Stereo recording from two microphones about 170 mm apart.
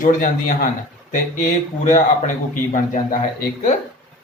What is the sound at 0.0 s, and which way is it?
Speech, 50° left (ahead or behind).